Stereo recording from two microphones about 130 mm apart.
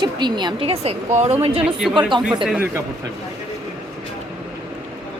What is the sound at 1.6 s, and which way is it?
Speech, centre (ahead or behind).